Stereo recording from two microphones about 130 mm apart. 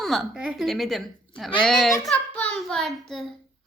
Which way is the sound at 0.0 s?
Centre (ahead or behind).